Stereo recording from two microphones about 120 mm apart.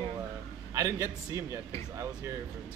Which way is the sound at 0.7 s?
25° right (ahead or behind).